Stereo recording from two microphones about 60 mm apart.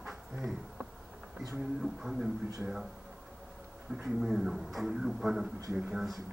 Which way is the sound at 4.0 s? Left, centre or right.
Centre.